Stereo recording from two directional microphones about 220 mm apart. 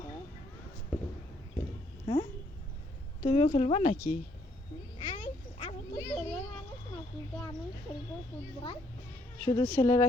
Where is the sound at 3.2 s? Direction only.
30° left (ahead or behind).